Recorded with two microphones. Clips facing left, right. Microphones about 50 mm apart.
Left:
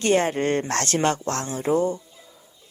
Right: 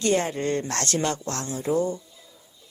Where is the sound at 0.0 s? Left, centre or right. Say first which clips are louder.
Left 3 dB; left.